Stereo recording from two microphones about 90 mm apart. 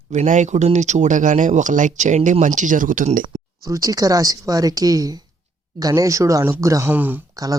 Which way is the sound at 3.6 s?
40° right (ahead or behind).